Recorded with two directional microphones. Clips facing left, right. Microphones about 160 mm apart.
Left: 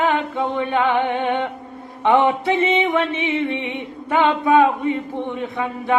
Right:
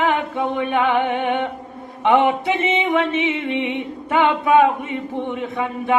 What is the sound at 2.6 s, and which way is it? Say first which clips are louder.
Music: even; 20° right (ahead or behind).